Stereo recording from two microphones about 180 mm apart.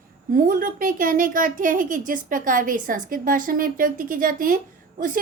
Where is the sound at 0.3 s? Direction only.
50° right (ahead or behind).